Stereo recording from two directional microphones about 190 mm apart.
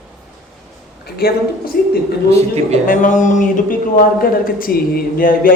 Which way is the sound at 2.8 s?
45° left (ahead or behind).